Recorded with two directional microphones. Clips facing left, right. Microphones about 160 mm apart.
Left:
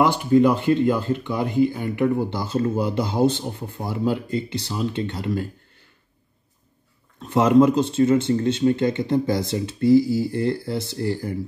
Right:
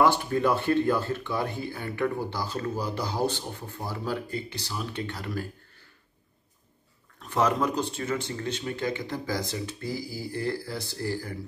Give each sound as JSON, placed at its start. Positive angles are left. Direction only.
{"t": 0.0, "sound": "speech", "side_deg": 15}
{"t": 7.2, "sound": "speech", "side_deg": 25}